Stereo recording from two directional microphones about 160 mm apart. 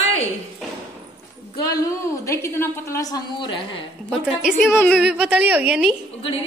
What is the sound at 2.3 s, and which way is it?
A woman's voice, 15° left (ahead or behind).